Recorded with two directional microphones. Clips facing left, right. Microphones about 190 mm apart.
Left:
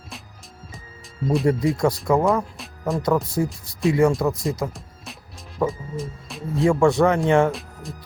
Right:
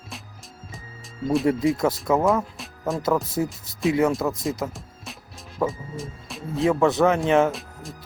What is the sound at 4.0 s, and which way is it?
Speech, centre (ahead or behind).